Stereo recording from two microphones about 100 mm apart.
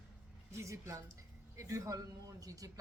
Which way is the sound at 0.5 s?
30° right (ahead or behind).